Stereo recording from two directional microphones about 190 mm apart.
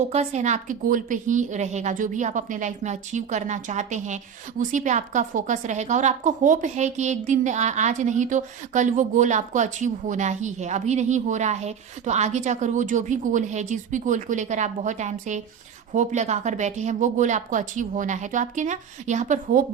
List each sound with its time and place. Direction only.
0.1 s a woman's voice: 35° right (ahead or behind)